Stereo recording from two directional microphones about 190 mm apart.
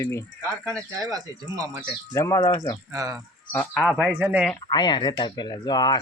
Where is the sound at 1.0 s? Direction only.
20° right (ahead or behind).